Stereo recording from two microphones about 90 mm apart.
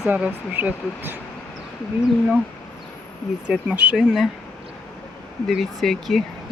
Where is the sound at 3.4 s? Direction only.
15° right (ahead or behind).